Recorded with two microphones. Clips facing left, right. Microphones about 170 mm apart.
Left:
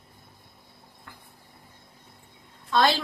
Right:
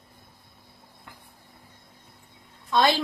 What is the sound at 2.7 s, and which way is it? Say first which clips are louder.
Speech: right 1 dB; 20° right (ahead or behind).